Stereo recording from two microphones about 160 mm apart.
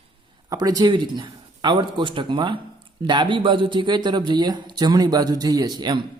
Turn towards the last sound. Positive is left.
turn(degrees=-25)  # may be behind; listen again after turning